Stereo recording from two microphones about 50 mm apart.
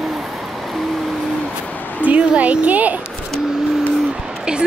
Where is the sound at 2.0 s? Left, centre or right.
Right.